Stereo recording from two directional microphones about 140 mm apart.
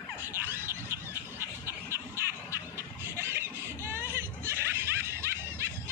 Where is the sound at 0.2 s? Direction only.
15° right (ahead or behind).